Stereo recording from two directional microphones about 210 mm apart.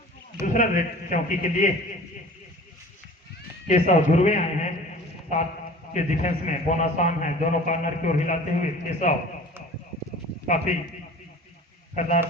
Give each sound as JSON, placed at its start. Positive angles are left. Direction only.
{"t": 0.4, "sound": "a man's voice", "side_deg": 40}
{"t": 3.7, "sound": "a man's voice", "side_deg": 35}
{"t": 10.4, "sound": "a man's voice", "side_deg": 35}
{"t": 11.9, "sound": "a man's voice", "side_deg": 35}